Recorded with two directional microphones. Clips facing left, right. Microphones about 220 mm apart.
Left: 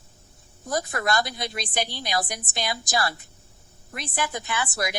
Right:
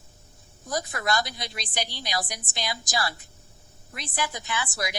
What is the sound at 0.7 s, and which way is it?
A woman's voice, 55° left (ahead or behind).